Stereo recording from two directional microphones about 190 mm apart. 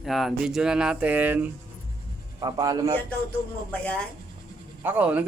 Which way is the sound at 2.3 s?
20° right (ahead or behind).